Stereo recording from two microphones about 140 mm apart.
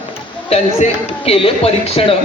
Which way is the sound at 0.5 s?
45° left (ahead or behind).